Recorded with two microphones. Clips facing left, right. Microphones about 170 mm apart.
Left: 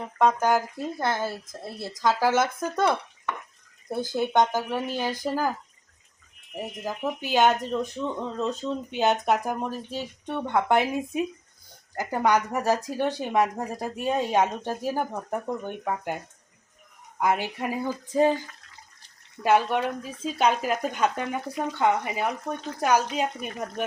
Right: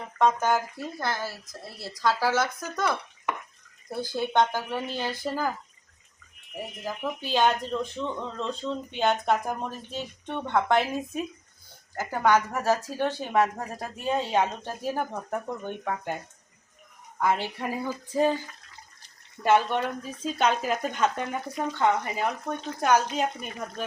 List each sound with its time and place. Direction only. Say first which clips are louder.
0.2 s speech: left 2 dB; 10° left (ahead or behind)
0.8 s speech: left 4 dB; 25° left (ahead or behind)
6.8 s speech: left 2 dB; 15° left (ahead or behind)
19.4 s speech: left 1 dB; 10° left (ahead or behind)